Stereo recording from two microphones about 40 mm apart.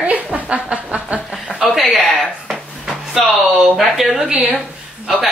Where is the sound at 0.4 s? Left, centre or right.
Right.